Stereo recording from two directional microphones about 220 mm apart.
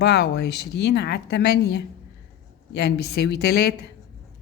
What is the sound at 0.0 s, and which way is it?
Speech, 50° left (ahead or behind).